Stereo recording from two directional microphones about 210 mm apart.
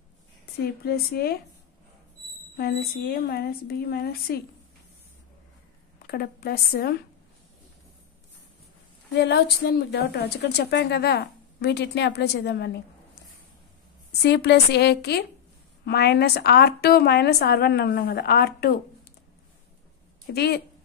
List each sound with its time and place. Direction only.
0.8 s a woman's voice: 50° left (ahead or behind)
2.5 s a woman's voice: 50° left (ahead or behind)
6.0 s a woman's voice: 50° left (ahead or behind)
9.1 s a woman's voice: 55° left (ahead or behind)
14.2 s a woman's voice: 55° left (ahead or behind)
20.2 s a woman's voice: 50° left (ahead or behind)